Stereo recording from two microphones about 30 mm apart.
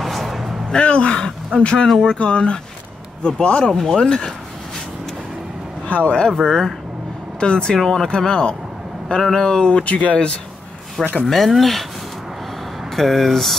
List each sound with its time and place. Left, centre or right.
0.0 s a sound: centre
0.7 s speech: left
1.9 s speech: centre
2.2 s speech: left
3.7 s speech: centre
4.0 s speech: left
5.9 s speech: left
6.4 s speech: centre
7.3 s speech: left; by 8.1 s centre
8.2 s speech: left
9.8 s speech: left
11.2 s speech: centre
12.9 s speech: centre